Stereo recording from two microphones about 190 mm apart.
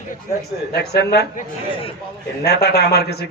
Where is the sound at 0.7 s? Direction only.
60° left (ahead or behind).